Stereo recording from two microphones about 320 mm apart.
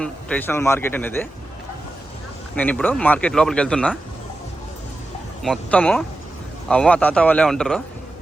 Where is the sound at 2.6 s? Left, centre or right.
Centre.